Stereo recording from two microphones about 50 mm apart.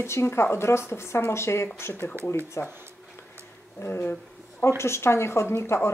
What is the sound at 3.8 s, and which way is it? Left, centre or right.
Speech, left.